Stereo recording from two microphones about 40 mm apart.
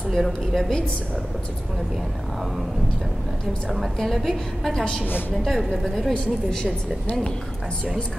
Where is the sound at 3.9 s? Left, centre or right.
Centre.